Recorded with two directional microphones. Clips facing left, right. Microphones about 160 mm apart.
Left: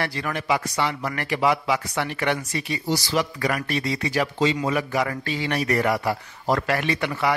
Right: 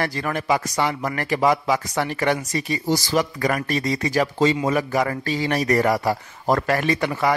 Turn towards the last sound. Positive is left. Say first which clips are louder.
# right 3 dB
turn(degrees=-40)  # may be behind; listen again after turning